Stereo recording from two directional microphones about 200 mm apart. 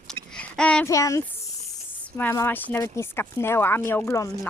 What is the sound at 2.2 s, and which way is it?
A woman's voice, 10° left (ahead or behind).